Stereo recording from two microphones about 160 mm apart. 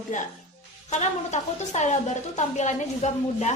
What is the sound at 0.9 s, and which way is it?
A woman's voice, 45° left (ahead or behind).